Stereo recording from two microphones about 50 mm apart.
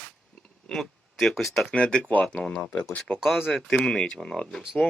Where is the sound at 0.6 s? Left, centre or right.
Centre.